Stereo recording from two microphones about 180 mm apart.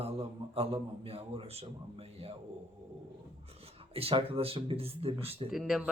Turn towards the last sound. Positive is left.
turn(degrees=0)  # may be behind; listen again after turning